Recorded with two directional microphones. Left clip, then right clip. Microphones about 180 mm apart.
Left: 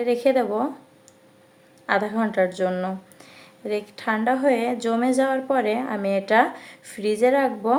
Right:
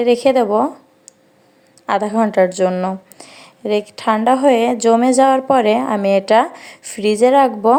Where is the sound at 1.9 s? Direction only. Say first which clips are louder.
Right 7 dB; 40° right (ahead or behind).